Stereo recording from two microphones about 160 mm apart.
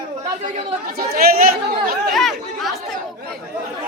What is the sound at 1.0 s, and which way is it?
Chatter, 65° right (ahead or behind).